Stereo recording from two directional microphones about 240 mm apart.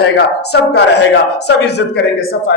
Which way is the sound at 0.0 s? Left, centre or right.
Left.